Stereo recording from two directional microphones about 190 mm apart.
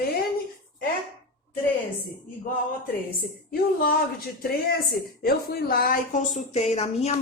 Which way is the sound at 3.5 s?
50° left (ahead or behind).